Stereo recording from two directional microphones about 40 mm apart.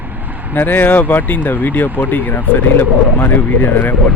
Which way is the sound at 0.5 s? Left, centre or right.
Left.